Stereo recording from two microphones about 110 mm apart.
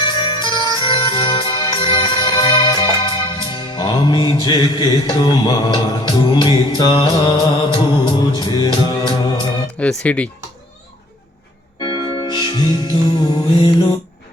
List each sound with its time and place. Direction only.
0.0 s music: 45° left (ahead or behind)
9.7 s speech: 10° left (ahead or behind)
11.8 s music: 45° left (ahead or behind)